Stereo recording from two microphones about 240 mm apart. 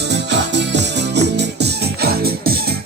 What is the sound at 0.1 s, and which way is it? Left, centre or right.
Music, right.